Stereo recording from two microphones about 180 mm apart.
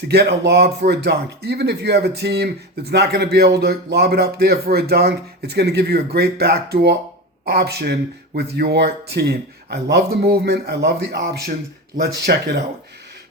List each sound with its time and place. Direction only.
0.1 s speech: 65° right (ahead or behind)